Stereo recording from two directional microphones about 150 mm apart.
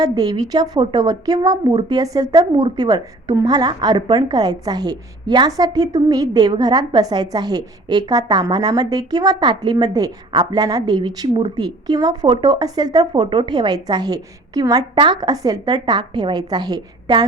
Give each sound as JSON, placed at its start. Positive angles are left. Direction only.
{"t": 0.0, "sound": "a woman's voice", "side_deg": -25}